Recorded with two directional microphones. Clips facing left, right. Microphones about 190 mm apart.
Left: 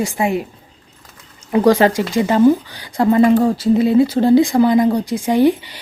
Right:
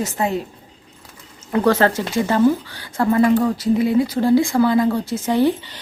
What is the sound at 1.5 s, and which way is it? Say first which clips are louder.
Speech: left 4 dB; 15° left (ahead or behind).